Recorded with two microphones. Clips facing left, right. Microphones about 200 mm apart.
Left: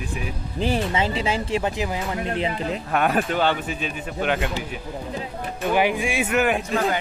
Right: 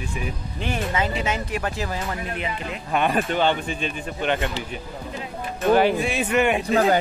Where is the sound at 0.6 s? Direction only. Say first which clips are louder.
Left 3 dB; 30° left (ahead or behind); by 2.3 s 15° left (ahead or behind).